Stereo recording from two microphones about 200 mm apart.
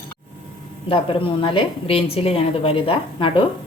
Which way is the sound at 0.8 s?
25° left (ahead or behind).